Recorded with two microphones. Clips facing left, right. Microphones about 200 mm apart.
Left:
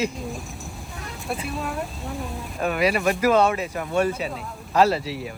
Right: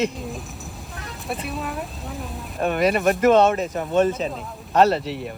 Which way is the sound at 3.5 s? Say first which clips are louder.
Right 3 dB; 40° right (ahead or behind).